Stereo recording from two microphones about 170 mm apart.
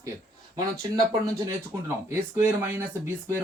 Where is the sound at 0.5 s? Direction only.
20° right (ahead or behind).